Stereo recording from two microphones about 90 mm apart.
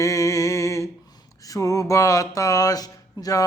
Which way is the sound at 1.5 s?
40° left (ahead or behind).